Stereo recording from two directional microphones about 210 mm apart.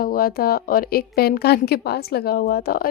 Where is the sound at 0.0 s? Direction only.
45° left (ahead or behind).